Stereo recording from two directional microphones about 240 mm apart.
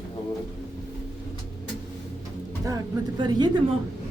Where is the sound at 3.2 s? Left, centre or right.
Centre.